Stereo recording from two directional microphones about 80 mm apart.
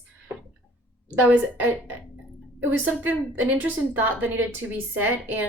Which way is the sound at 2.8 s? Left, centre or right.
Right.